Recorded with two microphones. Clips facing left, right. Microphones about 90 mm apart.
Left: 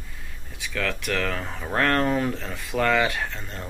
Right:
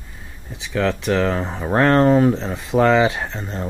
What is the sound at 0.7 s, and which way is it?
Speech, 25° right (ahead or behind).